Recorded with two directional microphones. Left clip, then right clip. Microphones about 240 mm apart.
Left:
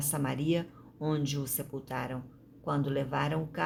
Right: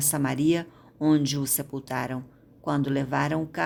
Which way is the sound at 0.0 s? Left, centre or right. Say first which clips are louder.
Right 8 dB; right.